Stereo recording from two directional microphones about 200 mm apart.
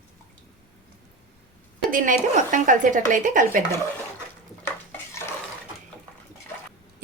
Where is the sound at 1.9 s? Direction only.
40° right (ahead or behind).